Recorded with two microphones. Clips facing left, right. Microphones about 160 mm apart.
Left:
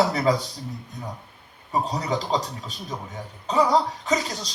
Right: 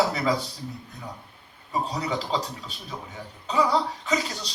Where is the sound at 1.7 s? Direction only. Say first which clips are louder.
Left 3 dB; 35° left (ahead or behind).